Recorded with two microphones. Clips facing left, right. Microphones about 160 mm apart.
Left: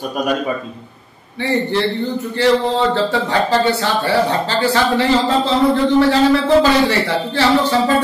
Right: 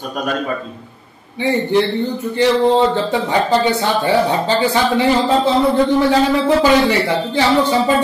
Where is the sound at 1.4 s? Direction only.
15° right (ahead or behind).